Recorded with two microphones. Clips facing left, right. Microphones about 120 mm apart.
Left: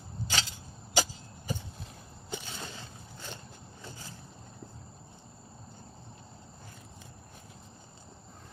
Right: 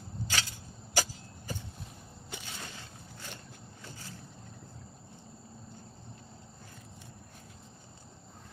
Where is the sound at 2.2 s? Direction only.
30° left (ahead or behind).